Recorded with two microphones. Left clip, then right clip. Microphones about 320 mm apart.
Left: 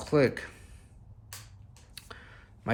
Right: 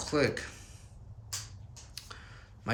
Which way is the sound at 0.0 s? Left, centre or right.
Centre.